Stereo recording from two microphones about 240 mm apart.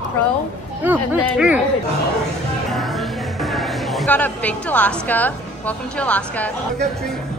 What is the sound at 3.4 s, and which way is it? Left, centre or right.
A woman's voice, centre.